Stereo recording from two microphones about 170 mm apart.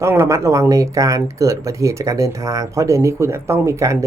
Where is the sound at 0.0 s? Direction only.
15° right (ahead or behind).